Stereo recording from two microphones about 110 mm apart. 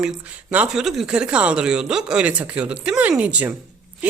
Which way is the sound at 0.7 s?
5° right (ahead or behind).